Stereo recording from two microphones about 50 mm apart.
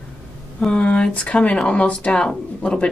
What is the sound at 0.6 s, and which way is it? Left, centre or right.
Speech, left.